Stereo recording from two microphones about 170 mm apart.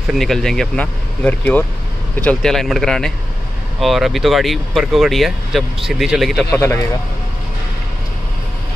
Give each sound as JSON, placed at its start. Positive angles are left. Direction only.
{"t": 0.1, "sound": "speech", "side_deg": 0}
{"t": 6.5, "sound": "speech", "side_deg": 15}